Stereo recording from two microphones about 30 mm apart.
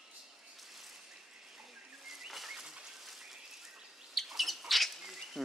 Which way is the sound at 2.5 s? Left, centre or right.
Right.